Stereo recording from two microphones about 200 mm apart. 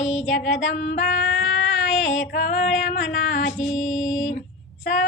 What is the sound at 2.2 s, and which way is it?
Female singing, 50° left (ahead or behind).